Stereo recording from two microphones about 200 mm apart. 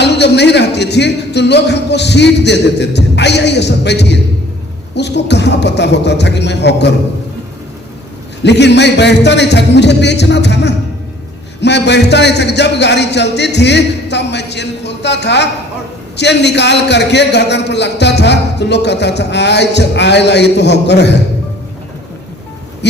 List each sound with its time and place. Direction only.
0.0 s a man's voice: 60° left (ahead or behind)
8.4 s a man's voice: 60° left (ahead or behind)
22.8 s a man's voice: 60° left (ahead or behind)